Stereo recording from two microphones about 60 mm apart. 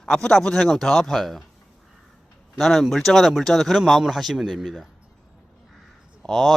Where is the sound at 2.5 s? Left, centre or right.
Centre.